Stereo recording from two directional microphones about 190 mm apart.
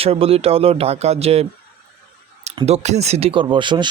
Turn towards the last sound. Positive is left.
turn(degrees=-25)  # may be behind; listen again after turning